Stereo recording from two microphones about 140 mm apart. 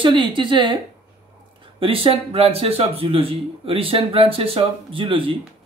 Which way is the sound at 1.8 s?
40° right (ahead or behind).